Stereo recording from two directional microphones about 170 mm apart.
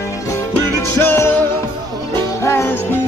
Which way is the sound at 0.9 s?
15° left (ahead or behind).